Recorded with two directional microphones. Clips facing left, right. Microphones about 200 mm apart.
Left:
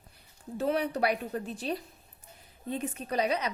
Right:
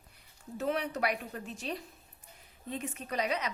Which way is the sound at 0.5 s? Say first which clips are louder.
Left 4 dB; 35° left (ahead or behind).